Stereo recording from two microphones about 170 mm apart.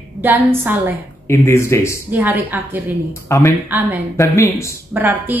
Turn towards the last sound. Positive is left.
turn(degrees=-10)  # may be behind; listen again after turning